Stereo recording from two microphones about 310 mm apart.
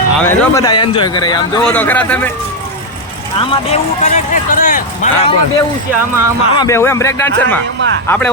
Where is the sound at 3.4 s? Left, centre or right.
Left.